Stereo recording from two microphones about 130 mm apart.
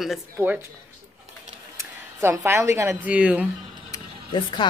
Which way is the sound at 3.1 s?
10° right (ahead or behind).